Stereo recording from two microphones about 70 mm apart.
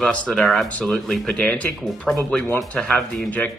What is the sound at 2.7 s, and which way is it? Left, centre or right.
Speech, centre.